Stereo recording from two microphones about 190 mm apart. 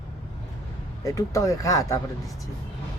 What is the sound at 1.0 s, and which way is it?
Speech, 15° left (ahead or behind).